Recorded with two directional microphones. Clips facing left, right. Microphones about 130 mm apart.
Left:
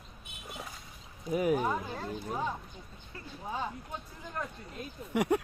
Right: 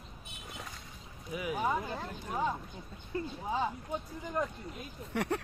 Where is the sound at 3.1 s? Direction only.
25° right (ahead or behind).